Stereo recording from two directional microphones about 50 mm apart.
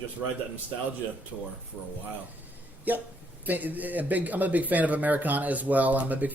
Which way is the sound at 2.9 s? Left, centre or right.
Right.